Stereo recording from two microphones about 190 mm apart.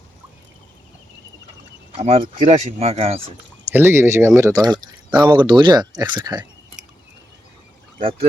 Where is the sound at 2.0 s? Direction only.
35° right (ahead or behind).